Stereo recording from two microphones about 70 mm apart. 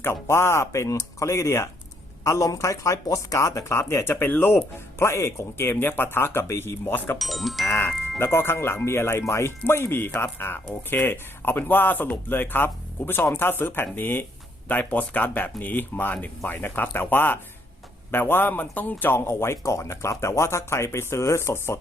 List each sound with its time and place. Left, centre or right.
0.0 s speech: left
7.2 s speech: centre
7.7 s speech: left
19.3 s speech: left